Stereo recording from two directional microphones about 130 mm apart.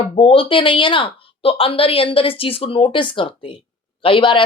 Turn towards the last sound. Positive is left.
turn(degrees=40)  # may be behind; listen again after turning